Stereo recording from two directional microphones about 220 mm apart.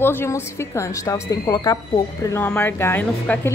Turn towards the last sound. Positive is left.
turn(degrees=10)  # may be behind; listen again after turning